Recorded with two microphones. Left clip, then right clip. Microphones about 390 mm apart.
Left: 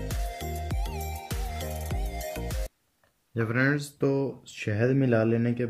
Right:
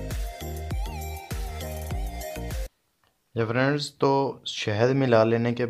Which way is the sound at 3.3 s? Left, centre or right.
Centre.